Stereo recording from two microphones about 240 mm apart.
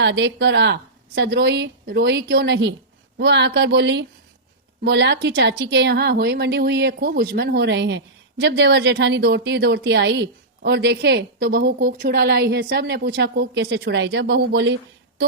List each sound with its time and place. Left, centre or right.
0.0 s a woman's voice: right